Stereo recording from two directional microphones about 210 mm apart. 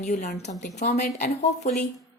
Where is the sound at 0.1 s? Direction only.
35° left (ahead or behind).